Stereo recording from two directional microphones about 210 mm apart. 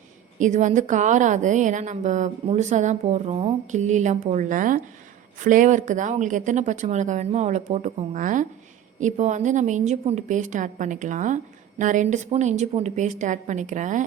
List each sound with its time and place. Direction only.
0.3 s a woman's voice: 35° right (ahead or behind)